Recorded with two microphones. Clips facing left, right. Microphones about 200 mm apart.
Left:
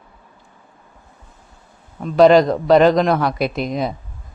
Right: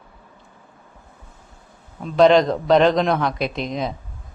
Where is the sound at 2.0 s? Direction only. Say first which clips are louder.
Left 3 dB; 5° left (ahead or behind).